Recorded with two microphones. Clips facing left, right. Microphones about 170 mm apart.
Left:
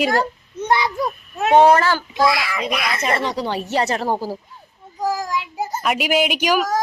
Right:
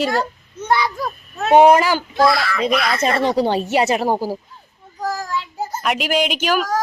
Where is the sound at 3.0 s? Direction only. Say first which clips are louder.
Right 4 dB; 30° right (ahead or behind).